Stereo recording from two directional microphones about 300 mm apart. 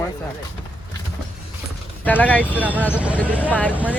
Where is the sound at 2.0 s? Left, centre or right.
Centre.